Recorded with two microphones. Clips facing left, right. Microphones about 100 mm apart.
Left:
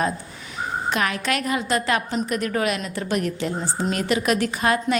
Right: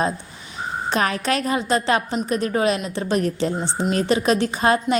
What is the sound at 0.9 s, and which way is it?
A woman's voice, 30° right (ahead or behind).